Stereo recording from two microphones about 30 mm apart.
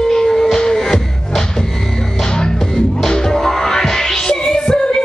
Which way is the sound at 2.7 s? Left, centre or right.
Left.